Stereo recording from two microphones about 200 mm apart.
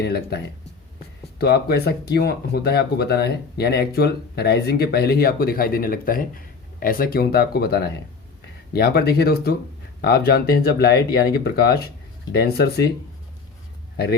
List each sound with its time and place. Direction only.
0.0 s speech: 55° left (ahead or behind)
13.9 s a man's voice: 55° left (ahead or behind)